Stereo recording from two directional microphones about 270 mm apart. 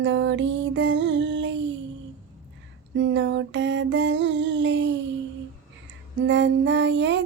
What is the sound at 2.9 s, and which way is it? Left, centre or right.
Child singing, right.